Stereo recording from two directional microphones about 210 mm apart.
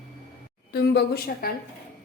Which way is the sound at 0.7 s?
50° left (ahead or behind).